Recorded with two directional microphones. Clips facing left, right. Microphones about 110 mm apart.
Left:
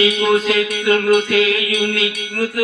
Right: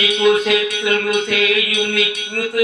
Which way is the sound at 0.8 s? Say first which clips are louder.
Left 3 dB; 35° left (ahead or behind).